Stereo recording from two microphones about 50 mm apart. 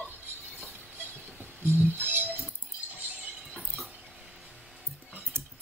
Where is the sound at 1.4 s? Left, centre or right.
Right.